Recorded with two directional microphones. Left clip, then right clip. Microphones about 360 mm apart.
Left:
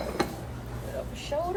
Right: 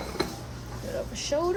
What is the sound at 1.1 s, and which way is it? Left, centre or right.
Speech, right.